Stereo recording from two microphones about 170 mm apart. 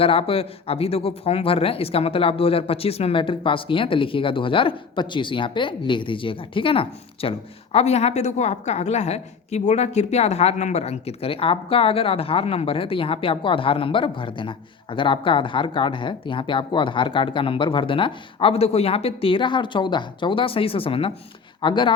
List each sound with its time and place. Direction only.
0.0 s speech: 35° left (ahead or behind)